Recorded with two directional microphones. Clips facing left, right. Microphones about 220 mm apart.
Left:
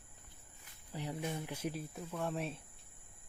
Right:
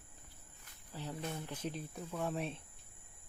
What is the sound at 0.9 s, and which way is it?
Speech, 15° left (ahead or behind).